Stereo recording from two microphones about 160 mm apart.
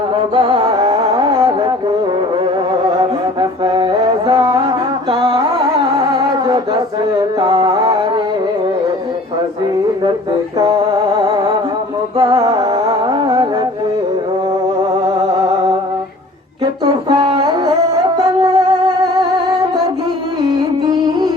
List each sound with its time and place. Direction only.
0.3 s carnatic music: 35° right (ahead or behind)
3.6 s mantra: 25° right (ahead or behind)
6.1 s mantra: 25° right (ahead or behind)
10.6 s music: 25° right (ahead or behind)
16.8 s music: 30° right (ahead or behind)
20.8 s music: 25° right (ahead or behind)